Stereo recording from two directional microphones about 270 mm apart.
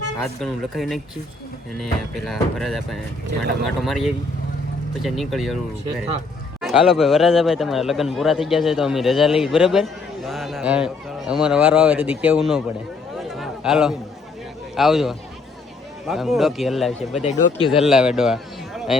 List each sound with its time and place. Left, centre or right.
0.2 s a man's voice: centre
6.6 s a man's voice: centre
13.1 s a sound: centre
14.8 s a man's voice: centre
17.2 s speech: centre
17.7 s a man's voice: centre